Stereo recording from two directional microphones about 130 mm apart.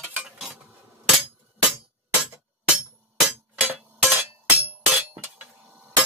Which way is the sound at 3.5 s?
10° right (ahead or behind).